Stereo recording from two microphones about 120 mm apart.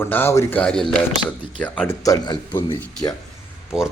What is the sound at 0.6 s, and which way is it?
Speech, 5° left (ahead or behind).